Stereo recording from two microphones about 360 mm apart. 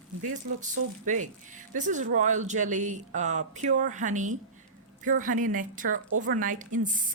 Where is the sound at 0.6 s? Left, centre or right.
Right.